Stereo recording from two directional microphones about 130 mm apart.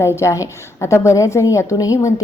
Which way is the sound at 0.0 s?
20° left (ahead or behind).